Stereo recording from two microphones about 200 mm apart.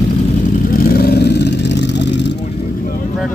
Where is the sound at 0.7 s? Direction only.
50° left (ahead or behind).